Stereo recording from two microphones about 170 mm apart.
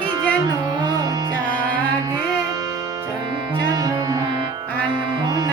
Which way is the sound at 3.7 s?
20° right (ahead or behind).